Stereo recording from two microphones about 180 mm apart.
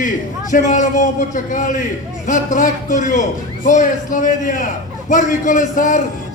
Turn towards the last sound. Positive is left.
turn(degrees=45)  # may be behind; listen again after turning